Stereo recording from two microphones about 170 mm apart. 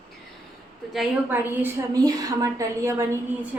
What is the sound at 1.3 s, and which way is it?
A woman's voice, 10° right (ahead or behind).